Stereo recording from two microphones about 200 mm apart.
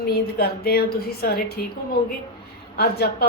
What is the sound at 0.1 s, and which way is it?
Speech, 50° left (ahead or behind).